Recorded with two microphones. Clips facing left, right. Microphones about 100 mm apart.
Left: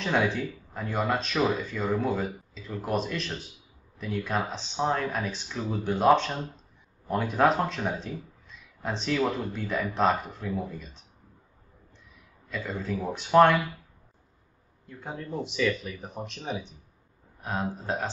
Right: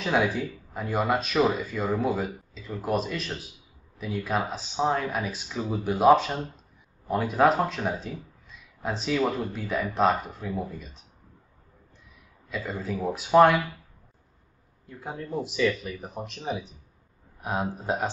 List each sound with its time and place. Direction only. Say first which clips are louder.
0.0 s speech: right 1 dB; 5° right (ahead or behind)
12.4 s speech: right 1 dB; 5° right (ahead or behind)
14.9 s speech: right 2 dB; 5° right (ahead or behind)
17.4 s speech: right 2 dB; 15° right (ahead or behind)